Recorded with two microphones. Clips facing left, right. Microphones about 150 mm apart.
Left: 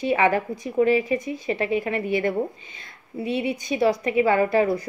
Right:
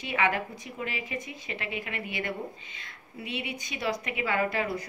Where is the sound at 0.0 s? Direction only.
35° left (ahead or behind).